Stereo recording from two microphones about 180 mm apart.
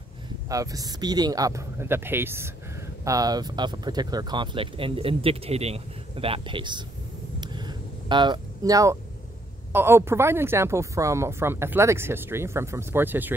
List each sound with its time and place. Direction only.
0.5 s speech: 20° right (ahead or behind)
7.3 s a sound: 25° right (ahead or behind)
9.7 s a woman's voice: 15° right (ahead or behind)